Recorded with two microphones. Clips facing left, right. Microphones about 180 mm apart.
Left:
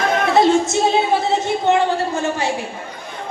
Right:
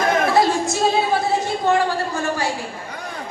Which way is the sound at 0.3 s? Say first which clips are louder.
Left 4 dB; 25° left (ahead or behind).